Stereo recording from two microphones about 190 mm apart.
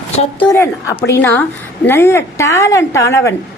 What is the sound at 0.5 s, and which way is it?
A woman's voice, 15° left (ahead or behind).